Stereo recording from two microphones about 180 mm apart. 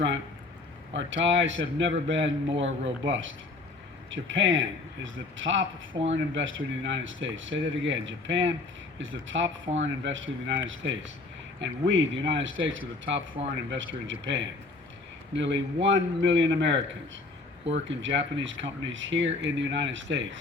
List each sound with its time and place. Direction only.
0.9 s a man's voice: 90° right
5.9 s speech: 35° right (ahead or behind)
6.3 s a man's voice: 90° right
15.4 s a man's voice: 90° right